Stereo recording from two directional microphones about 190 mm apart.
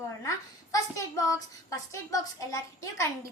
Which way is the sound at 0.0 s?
15° left (ahead or behind).